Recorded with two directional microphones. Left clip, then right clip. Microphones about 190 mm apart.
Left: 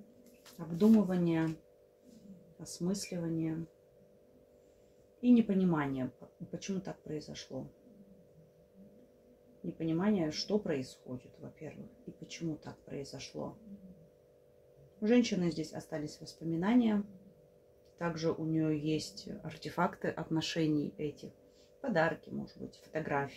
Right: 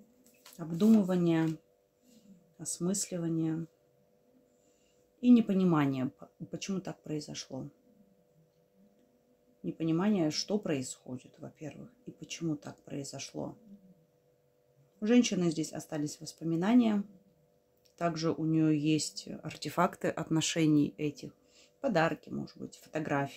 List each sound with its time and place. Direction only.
0.7 s speech: 55° right (ahead or behind)
2.6 s speech: 55° right (ahead or behind)
5.2 s speech: 55° right (ahead or behind)
9.8 s speech: 55° right (ahead or behind)
12.2 s speech: 55° right (ahead or behind)
15.0 s speech: 55° right (ahead or behind)
17.9 s speech: 55° right (ahead or behind)